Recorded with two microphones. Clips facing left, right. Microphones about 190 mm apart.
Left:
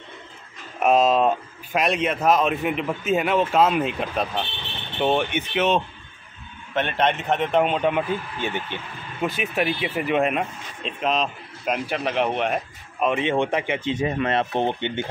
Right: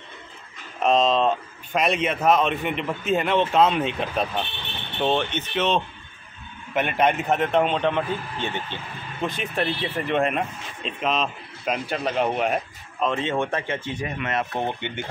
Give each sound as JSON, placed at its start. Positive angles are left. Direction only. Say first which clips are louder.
{"t": 0.7, "sound": "speech", "louder": "left 2 dB", "side_deg": 5}
{"t": 6.7, "sound": "speech", "louder": "right 1 dB", "side_deg": -10}
{"t": 13.0, "sound": "speech", "louder": "left 2 dB", "side_deg": 15}
{"t": 14.5, "sound": "speech", "louder": "left 4 dB", "side_deg": 20}